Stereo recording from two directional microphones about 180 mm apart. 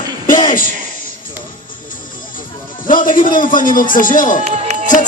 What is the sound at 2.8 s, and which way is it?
A man's voice, 50° left (ahead or behind).